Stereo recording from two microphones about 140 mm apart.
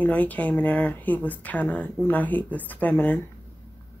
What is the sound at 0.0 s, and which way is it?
Speech, 10° left (ahead or behind).